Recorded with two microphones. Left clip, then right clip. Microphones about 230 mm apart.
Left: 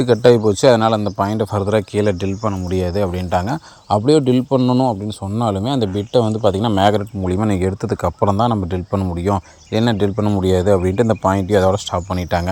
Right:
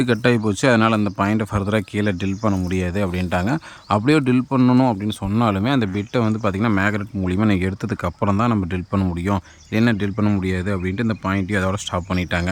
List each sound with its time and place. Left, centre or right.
0.0 s speech: centre
4.1 s a man's voice: centre
4.8 s speech: right
5.8 s a man's voice: centre
6.2 s speech: right
6.5 s a man's voice: centre
6.9 s speech: centre